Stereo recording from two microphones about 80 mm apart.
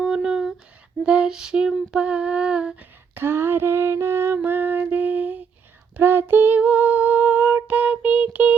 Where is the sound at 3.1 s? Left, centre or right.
Right.